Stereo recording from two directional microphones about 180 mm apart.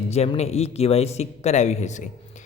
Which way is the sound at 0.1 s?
35° left (ahead or behind).